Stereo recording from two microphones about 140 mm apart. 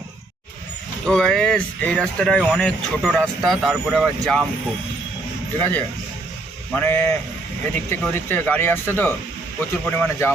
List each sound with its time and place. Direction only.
1.0 s a man's voice: 5° left (ahead or behind)
5.5 s speech: 15° left (ahead or behind)
8.0 s speech: 10° left (ahead or behind)